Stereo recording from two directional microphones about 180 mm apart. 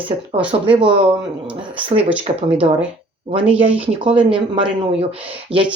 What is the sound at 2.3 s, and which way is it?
Speech, 35° right (ahead or behind).